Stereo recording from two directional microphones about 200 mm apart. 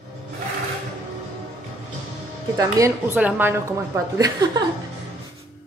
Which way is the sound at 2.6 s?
15° right (ahead or behind).